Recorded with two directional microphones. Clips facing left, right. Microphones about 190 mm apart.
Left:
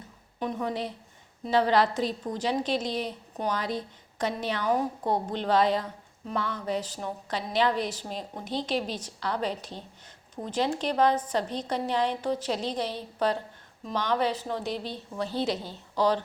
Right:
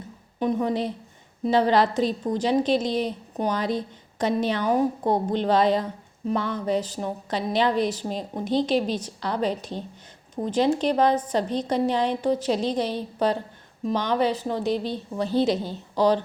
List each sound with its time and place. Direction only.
0.3 s a woman's voice: 20° right (ahead or behind)